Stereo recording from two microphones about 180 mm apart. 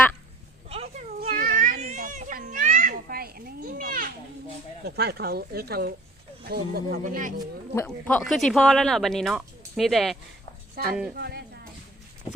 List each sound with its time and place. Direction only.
0.7 s a sound: 35° right (ahead or behind)
1.3 s children playing: 50° right (ahead or behind)
4.9 s speech: 60° right (ahead or behind); by 7.3 s 45° right (ahead or behind)
7.9 s speech: 5° left (ahead or behind)
10.8 s speech: 55° right (ahead or behind)